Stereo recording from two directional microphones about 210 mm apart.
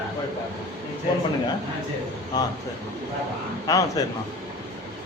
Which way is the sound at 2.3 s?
20° left (ahead or behind).